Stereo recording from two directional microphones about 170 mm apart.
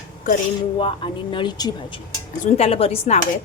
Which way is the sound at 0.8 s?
30° left (ahead or behind).